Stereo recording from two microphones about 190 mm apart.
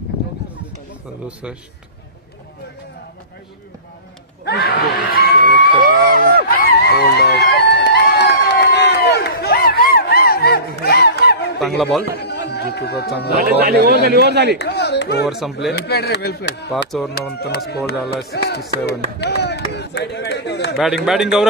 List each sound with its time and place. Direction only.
1.2 s speech: 5° right (ahead or behind)
4.5 s screaming: 55° left (ahead or behind)
5.8 s music: 50° right (ahead or behind)
6.5 s a sound: 55° left (ahead or behind)
11.6 s speech: centre (ahead or behind)
12.0 s a sound: 60° left (ahead or behind)
13.3 s speech: 55° right (ahead or behind)
14.6 s speech: 60° left (ahead or behind)
15.2 s speech: centre (ahead or behind)
15.7 s speech: 60° left (ahead or behind)
16.9 s speech: centre (ahead or behind)
17.6 s speech: 60° left (ahead or behind)
20.7 s speech: centre (ahead or behind)